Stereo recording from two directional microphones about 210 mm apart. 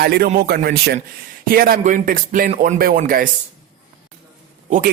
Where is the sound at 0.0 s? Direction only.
45° right (ahead or behind).